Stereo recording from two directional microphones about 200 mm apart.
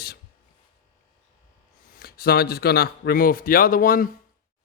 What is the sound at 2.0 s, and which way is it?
Speech, 50° left (ahead or behind).